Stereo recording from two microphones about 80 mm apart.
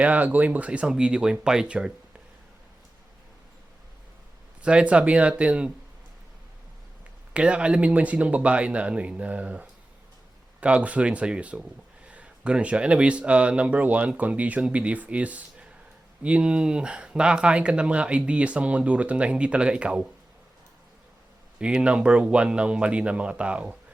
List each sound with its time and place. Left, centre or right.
0.0 s speech: centre
4.6 s speech: centre
7.3 s speech: centre
21.6 s speech: centre